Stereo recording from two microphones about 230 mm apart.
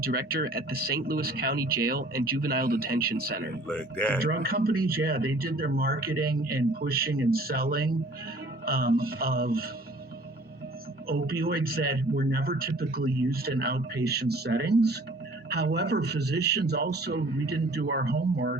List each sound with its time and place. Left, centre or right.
0.0 s speech: right
3.7 s speech: centre
4.2 s speech: right
11.1 s a man's voice: right